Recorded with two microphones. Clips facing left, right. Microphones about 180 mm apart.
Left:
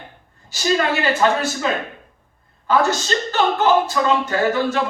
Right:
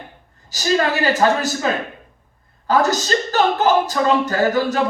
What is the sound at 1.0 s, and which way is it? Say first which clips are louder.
Speech: right 1 dB; 40° right (ahead or behind).